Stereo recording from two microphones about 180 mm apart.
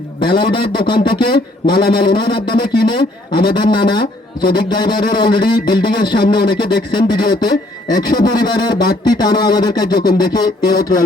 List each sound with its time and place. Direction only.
0.3 s speech: 25° left (ahead or behind)